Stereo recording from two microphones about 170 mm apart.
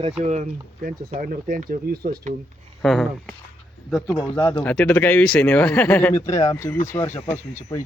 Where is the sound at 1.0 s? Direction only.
50° right (ahead or behind).